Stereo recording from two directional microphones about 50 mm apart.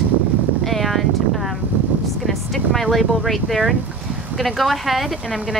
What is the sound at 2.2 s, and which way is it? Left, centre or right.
A woman's voice, centre.